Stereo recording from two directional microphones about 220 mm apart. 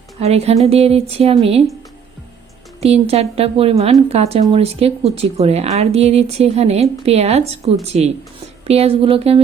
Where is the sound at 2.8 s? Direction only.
30° right (ahead or behind).